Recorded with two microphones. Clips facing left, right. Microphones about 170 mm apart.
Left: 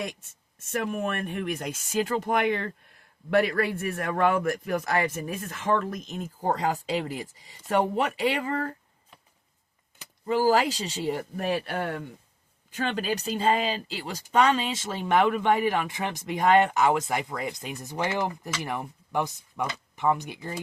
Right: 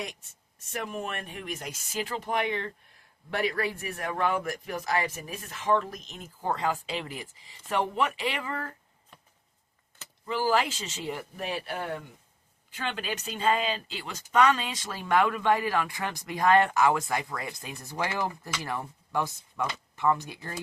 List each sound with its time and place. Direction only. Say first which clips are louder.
0.7 s speech: left 6 dB; 55° left (ahead or behind)
3.2 s a man's voice: left 6 dB; 60° left (ahead or behind); by 8.7 s 40° left (ahead or behind)
10.2 s speech: left 4 dB; 40° left (ahead or behind)
11.3 s a man's voice: left 5 dB; 50° left (ahead or behind)
12.7 s speech: left 6 dB; 40° left (ahead or behind); by 20.6 s 20° left (ahead or behind)